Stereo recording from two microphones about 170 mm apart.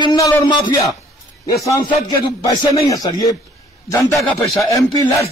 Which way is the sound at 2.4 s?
20° left (ahead or behind).